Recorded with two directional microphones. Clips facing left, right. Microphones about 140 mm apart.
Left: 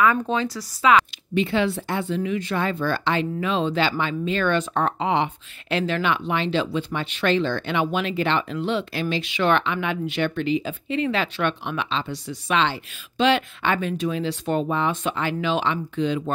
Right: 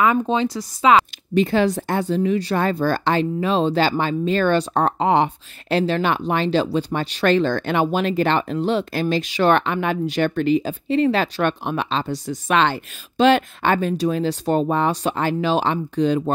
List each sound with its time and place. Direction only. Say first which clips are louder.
0.0 s speech: right 3 dB; 25° right (ahead or behind)
0.9 s speech: right 3 dB; 40° right (ahead or behind)